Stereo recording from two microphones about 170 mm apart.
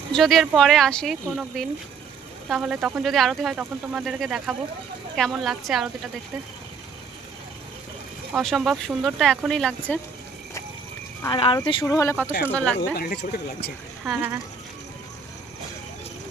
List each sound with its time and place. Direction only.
0.1 s speech: centre (ahead or behind)
8.3 s speech: centre (ahead or behind)
11.3 s speech: 30° left (ahead or behind)
11.9 s speech: 15° left (ahead or behind)
12.7 s speech: 75° left (ahead or behind)
14.0 s speech: 5° right (ahead or behind)